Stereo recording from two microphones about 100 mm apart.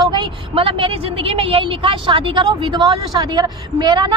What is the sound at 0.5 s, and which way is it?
A woman's voice, 60° right (ahead or behind).